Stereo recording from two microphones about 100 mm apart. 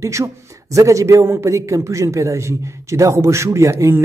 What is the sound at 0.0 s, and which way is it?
Speech, 30° right (ahead or behind).